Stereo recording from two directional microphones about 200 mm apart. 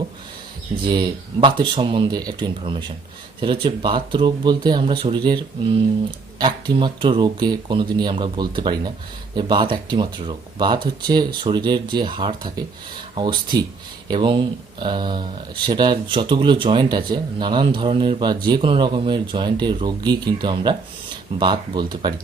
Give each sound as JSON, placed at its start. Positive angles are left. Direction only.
{"t": 0.9, "sound": "speech", "side_deg": -20}